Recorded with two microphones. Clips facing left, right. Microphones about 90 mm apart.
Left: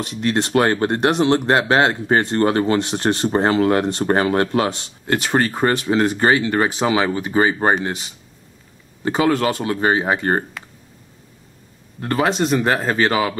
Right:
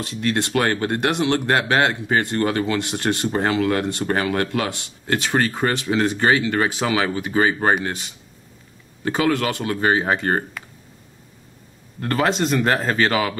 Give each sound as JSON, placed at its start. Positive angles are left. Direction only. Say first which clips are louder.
{"t": 0.2, "sound": "speech", "louder": "left 3 dB", "side_deg": 30}
{"t": 12.3, "sound": "speech", "louder": "left 1 dB", "side_deg": 5}
{"t": 12.9, "sound": "speech", "louder": "left 2 dB", "side_deg": 25}